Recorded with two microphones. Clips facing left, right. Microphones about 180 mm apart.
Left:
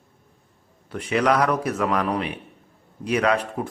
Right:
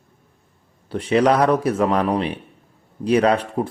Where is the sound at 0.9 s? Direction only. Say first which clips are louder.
Right 4 dB; 30° right (ahead or behind).